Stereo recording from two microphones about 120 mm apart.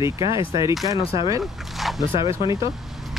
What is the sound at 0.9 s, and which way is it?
Speech, 45° left (ahead or behind).